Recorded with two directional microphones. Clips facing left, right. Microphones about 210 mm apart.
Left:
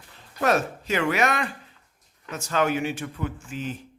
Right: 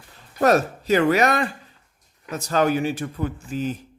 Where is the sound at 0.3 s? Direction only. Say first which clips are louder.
Right 5 dB; 40° right (ahead or behind).